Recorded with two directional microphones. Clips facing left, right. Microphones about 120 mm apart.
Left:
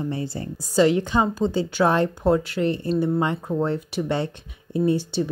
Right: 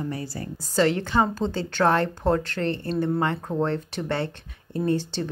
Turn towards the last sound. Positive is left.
turn(degrees=10)  # may be behind; listen again after turning